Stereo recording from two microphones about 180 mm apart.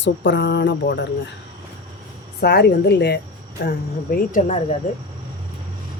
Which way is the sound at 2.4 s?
65° left (ahead or behind).